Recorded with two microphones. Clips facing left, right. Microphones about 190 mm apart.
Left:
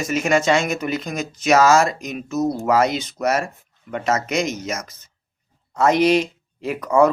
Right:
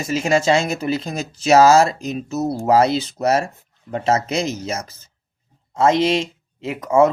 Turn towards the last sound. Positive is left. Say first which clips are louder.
# right 1 dB
turn(degrees=-25)  # may be behind; listen again after turning